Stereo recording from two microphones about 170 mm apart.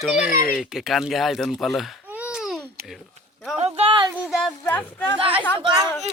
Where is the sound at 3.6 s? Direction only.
35° right (ahead or behind).